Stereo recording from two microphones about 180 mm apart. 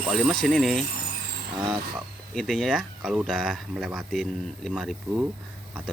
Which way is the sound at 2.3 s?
5° left (ahead or behind).